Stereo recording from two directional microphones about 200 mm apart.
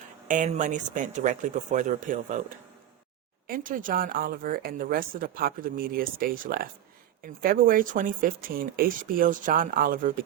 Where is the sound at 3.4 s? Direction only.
45° right (ahead or behind).